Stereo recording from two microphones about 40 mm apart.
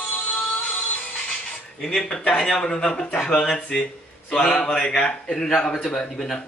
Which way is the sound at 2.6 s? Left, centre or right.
Centre.